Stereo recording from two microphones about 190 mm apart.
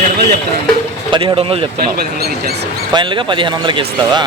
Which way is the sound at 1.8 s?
55° right (ahead or behind).